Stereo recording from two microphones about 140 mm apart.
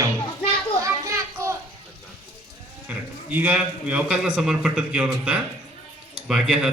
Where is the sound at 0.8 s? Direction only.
20° right (ahead or behind).